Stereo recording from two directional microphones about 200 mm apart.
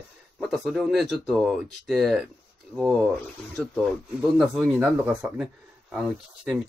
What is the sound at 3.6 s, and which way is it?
Speech, 5° left (ahead or behind).